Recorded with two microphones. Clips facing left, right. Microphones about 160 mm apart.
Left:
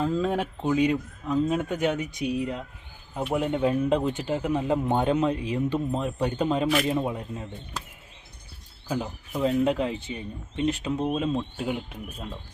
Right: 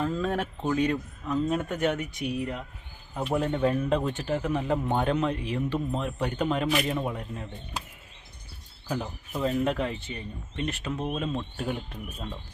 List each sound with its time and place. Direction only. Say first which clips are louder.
0.0 s speech: left 3 dB; 15° left (ahead or behind)
8.9 s speech: left 2 dB; 15° left (ahead or behind)